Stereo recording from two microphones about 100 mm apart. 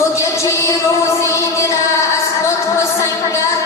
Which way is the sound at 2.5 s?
30° left (ahead or behind).